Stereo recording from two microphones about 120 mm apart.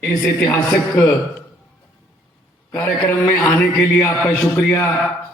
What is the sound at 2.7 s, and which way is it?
A man's voice, 20° left (ahead or behind).